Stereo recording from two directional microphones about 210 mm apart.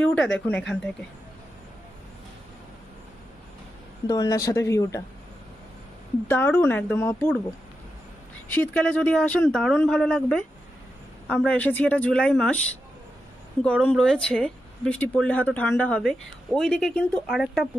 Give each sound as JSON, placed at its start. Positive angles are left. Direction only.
{"t": 0.0, "sound": "speech", "side_deg": 5}
{"t": 4.1, "sound": "a woman's voice", "side_deg": 15}
{"t": 6.2, "sound": "a woman's voice", "side_deg": 10}
{"t": 8.5, "sound": "a woman's voice", "side_deg": 5}
{"t": 13.7, "sound": "speech", "side_deg": 5}